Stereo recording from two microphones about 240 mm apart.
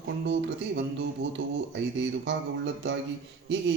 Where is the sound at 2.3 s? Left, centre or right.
Right.